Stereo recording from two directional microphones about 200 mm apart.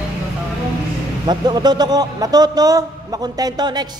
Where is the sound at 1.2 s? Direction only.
20° right (ahead or behind).